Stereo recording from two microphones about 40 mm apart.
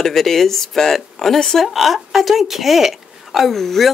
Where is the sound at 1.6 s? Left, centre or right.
Centre.